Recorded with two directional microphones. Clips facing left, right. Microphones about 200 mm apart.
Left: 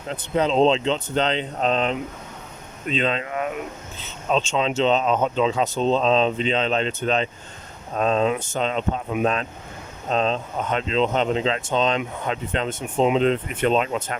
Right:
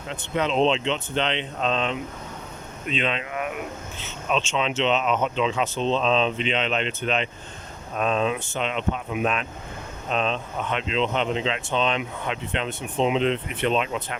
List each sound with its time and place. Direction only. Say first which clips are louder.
0.1 s speech: left 4 dB; 35° left (ahead or behind)